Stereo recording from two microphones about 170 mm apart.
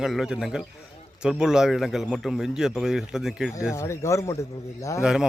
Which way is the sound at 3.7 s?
15° left (ahead or behind).